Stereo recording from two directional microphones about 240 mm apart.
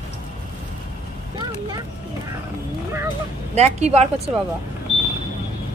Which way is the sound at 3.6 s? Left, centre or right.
Right.